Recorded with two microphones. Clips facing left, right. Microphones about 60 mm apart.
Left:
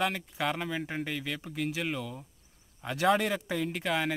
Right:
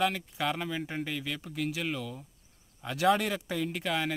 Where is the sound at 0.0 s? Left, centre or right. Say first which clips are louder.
Right 1 dB; centre.